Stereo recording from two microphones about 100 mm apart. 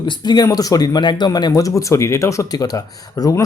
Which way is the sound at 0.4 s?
35° left (ahead or behind).